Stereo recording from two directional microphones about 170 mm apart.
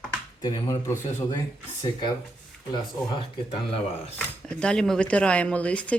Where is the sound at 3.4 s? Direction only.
35° left (ahead or behind).